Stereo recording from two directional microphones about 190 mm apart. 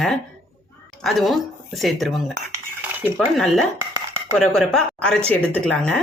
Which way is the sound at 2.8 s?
10° right (ahead or behind).